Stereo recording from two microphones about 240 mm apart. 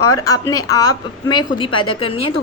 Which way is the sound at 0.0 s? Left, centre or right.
Centre.